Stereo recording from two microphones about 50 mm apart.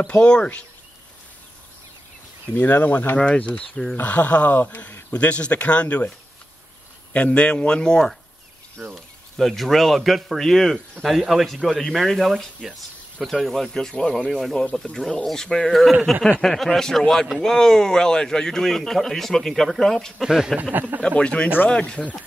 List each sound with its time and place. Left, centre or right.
0.0 s speech: left
2.5 s speech: left
4.0 s speech: left; by 8.1 s centre
8.9 s speech: centre
20.2 s speech: centre
21.0 s speech: left